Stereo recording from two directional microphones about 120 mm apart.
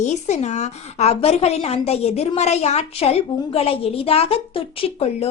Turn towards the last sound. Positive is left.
turn(degrees=55)  # may be behind; listen again after turning